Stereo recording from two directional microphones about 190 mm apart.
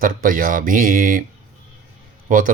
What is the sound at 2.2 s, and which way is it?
Speech, 45° right (ahead or behind).